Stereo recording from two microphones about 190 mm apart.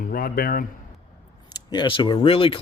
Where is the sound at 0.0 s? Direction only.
50° left (ahead or behind).